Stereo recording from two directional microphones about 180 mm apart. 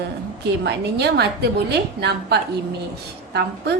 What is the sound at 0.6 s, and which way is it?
A woman's voice, 65° right (ahead or behind).